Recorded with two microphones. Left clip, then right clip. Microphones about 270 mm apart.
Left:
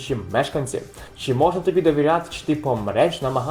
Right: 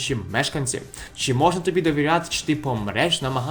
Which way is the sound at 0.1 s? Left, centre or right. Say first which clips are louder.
Left 2 dB; right.